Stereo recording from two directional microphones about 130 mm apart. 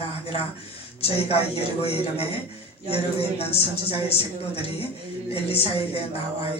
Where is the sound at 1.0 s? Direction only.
50° left (ahead or behind).